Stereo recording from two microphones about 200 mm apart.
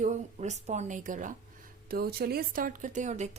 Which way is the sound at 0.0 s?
35° right (ahead or behind).